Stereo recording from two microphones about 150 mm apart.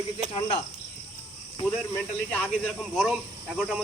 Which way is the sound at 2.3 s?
10° left (ahead or behind).